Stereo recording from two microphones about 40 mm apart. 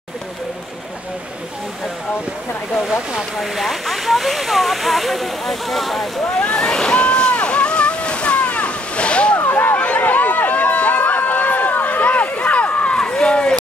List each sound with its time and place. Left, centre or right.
2.9 s speech: centre
3.3 s speech: centre
6.4 s slosh: centre
7.4 s waves: left
9.4 s a sound: left
9.8 s run: left
12.9 s a sound: centre